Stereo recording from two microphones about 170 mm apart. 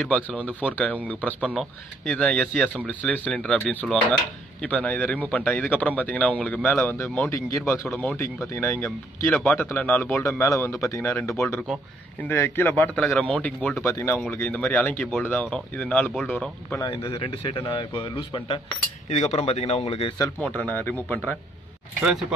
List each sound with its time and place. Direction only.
0.0 s speech: 5° left (ahead or behind)
16.9 s a man's voice: 30° left (ahead or behind)
19.0 s a man's voice: 45° left (ahead or behind)
20.3 s speech: 10° left (ahead or behind)